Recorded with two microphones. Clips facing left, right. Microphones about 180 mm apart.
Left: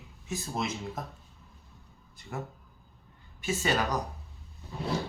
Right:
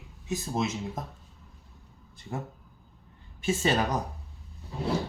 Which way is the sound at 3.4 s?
25° right (ahead or behind).